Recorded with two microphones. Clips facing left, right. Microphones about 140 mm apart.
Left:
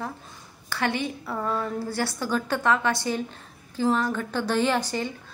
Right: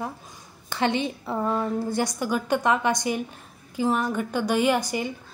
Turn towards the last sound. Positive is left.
turn(degrees=-10)  # may be behind; listen again after turning